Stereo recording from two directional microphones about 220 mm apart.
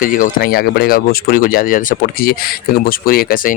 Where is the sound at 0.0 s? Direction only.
35° left (ahead or behind).